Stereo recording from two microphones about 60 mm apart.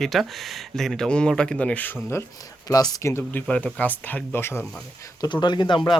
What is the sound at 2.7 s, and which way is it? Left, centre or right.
Speech, left.